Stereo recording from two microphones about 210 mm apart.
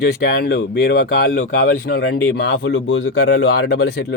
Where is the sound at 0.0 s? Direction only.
45° left (ahead or behind).